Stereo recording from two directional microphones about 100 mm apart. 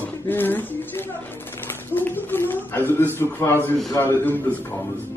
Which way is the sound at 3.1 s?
25° left (ahead or behind).